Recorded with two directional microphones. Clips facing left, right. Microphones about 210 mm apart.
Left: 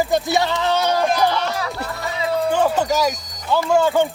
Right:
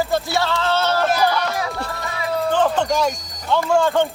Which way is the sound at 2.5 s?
10° left (ahead or behind).